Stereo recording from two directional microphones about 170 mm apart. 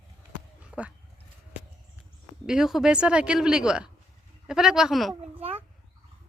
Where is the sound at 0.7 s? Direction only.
5° right (ahead or behind).